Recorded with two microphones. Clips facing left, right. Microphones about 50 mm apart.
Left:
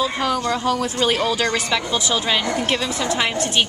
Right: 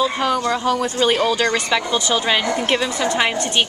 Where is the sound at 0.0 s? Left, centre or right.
Centre.